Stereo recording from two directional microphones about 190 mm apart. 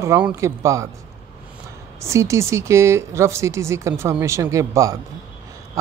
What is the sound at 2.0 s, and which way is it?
Speech, 15° right (ahead or behind).